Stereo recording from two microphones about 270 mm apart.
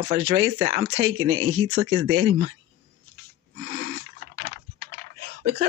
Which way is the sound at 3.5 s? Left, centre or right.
Right.